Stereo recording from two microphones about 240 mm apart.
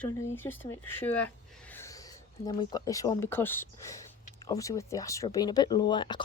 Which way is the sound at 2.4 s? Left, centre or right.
Centre.